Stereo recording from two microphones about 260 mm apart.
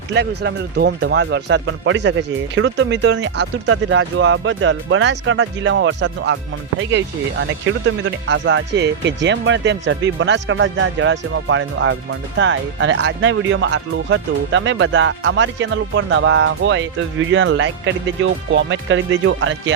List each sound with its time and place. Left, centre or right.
0.1 s speech: right